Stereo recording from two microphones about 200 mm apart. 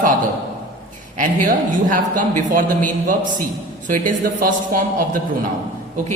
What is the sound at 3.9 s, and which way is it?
Speech, 45° right (ahead or behind).